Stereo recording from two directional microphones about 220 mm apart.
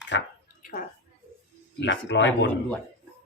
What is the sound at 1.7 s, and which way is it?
Speech, 55° left (ahead or behind).